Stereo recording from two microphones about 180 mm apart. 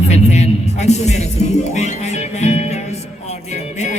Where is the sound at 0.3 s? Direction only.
40° left (ahead or behind).